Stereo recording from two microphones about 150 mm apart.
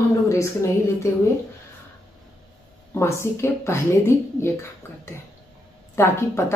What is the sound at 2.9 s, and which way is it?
Speech, 15° left (ahead or behind).